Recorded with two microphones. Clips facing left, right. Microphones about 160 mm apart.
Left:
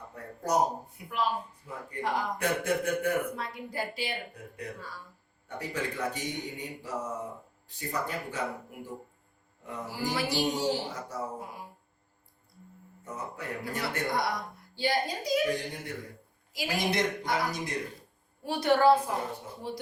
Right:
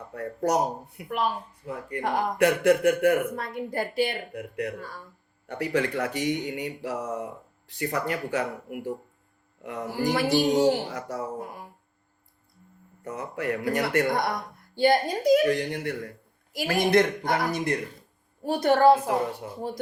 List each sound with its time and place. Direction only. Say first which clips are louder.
0.1 s speech: right 4 dB; 75° right (ahead or behind); by 1.2 s 60° right (ahead or behind)
1.6 s speech: right 6 dB; 70° right (ahead or behind)
3.3 s a woman's voice: right 6 dB; 50° right (ahead or behind)
4.4 s speech: right 9 dB; 80° right
10.2 s a woman's voice: right 8 dB; 55° right (ahead or behind)
10.5 s speech: right 8 dB; 70° right (ahead or behind)
13.1 s a woman's voice: right 8 dB; 75° right (ahead or behind); by 15.4 s 55° right (ahead or behind)
15.5 s speech: right 7 dB; 75° right (ahead or behind)
16.5 s speech: right 8 dB; 55° right (ahead or behind)
18.4 s a woman's voice: right 4 dB; 45° right (ahead or behind)